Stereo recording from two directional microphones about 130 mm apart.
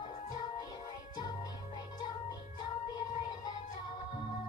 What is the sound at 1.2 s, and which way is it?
Music, 35° left (ahead or behind).